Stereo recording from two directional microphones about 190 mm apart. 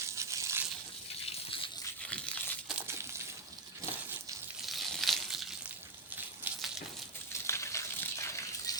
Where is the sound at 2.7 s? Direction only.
10° right (ahead or behind).